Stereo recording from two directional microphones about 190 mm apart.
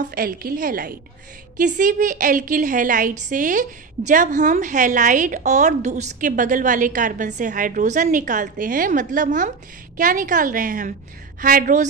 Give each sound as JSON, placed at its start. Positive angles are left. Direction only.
{"t": 0.0, "sound": "a woman's voice", "side_deg": -50}